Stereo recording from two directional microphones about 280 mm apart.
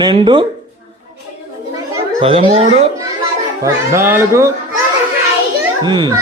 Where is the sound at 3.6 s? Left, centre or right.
Centre.